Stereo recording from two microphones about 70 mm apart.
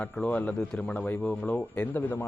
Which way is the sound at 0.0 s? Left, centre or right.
Left.